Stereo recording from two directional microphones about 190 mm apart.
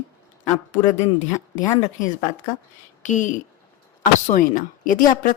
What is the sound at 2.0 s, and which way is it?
A woman's voice, 45° left (ahead or behind).